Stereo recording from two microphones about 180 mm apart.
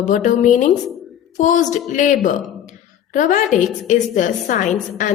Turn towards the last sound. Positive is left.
turn(degrees=45)  # may be behind; listen again after turning